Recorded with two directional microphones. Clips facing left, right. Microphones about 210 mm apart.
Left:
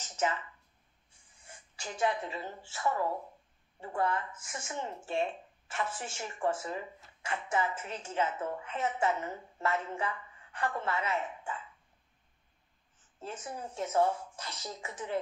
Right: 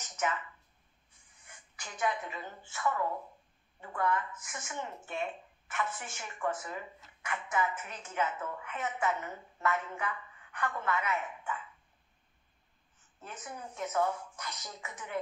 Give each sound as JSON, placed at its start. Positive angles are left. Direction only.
{"t": 0.0, "sound": "a sound", "side_deg": 30}
{"t": 1.5, "sound": "a woman's voice", "side_deg": 30}
{"t": 13.2, "sound": "speech", "side_deg": 30}